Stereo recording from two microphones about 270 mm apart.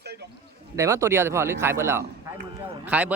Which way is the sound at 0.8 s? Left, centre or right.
Centre.